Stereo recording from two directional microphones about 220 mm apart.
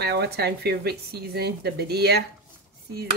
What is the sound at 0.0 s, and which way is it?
Speech, 50° right (ahead or behind).